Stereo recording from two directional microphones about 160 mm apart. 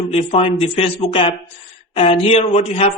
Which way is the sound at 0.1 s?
40° left (ahead or behind).